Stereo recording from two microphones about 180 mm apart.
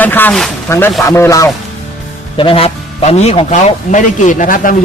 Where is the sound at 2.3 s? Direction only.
30° left (ahead or behind); by 4.7 s 45° left (ahead or behind).